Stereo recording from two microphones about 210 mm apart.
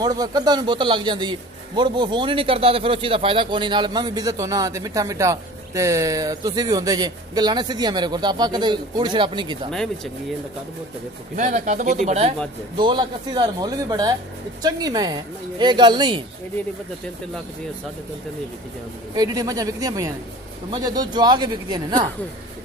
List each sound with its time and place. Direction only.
0.0 s speech: 20° right (ahead or behind)
11.3 s speech: 35° right (ahead or behind)
12.7 s speech: 20° right (ahead or behind)
19.1 s a woman's voice: 20° right (ahead or behind)